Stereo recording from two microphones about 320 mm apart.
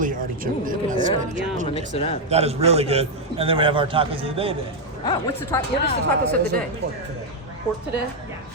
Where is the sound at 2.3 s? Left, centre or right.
Centre.